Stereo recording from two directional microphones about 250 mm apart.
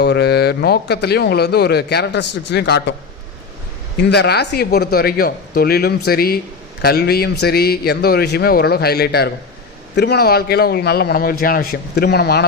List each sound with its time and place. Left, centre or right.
0.0 s a man's voice: left
4.1 s a man's voice: left